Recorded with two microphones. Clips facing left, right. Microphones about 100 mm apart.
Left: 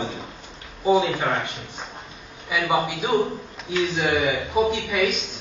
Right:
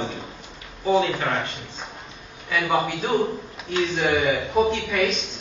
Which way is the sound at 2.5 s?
10° left (ahead or behind).